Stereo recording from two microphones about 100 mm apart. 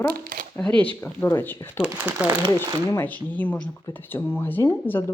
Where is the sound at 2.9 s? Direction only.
20° left (ahead or behind).